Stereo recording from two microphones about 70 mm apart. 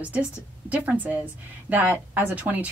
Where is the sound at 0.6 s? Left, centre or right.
Right.